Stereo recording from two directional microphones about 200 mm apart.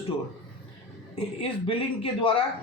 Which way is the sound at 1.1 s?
25° left (ahead or behind).